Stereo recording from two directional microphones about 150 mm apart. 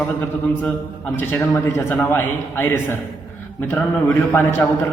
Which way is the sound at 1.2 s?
15° left (ahead or behind).